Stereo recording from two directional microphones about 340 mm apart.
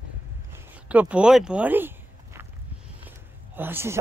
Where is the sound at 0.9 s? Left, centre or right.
Centre.